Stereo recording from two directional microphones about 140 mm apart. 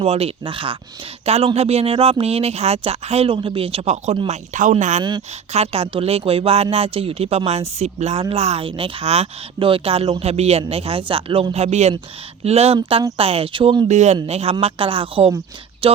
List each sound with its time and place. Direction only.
0.0 s speech: 45° right (ahead or behind)
13.8 s speech: 55° right (ahead or behind)
15.8 s a sound: 40° right (ahead or behind)